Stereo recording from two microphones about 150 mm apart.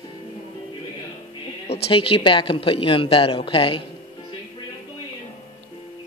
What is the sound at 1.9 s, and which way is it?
A woman's voice, 35° left (ahead or behind).